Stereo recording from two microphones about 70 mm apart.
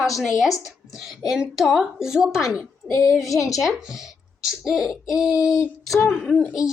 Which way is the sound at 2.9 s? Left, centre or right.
Left.